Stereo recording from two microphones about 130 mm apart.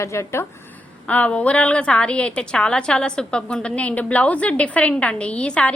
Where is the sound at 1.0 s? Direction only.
10° left (ahead or behind).